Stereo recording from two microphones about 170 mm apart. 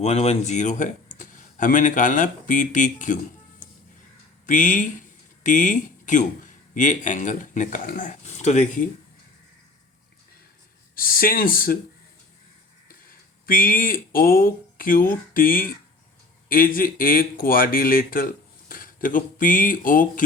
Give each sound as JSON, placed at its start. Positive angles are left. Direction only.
{"t": 0.0, "sound": "speech", "side_deg": 40}
{"t": 4.4, "sound": "speech", "side_deg": 50}
{"t": 10.9, "sound": "speech", "side_deg": 60}
{"t": 13.4, "sound": "speech", "side_deg": 55}